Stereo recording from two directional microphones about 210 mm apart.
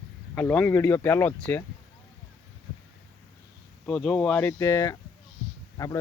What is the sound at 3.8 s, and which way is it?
Speech, 5° left (ahead or behind).